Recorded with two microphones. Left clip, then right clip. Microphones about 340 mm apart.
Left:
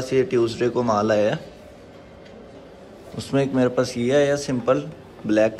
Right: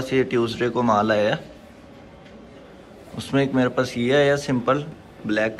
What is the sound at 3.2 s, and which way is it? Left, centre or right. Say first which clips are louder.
A man's voice: even; centre.